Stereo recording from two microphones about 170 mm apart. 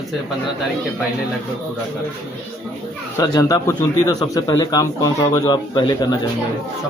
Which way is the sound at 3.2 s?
20° left (ahead or behind).